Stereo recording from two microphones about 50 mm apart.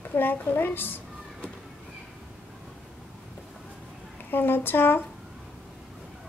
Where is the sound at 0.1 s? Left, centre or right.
Left.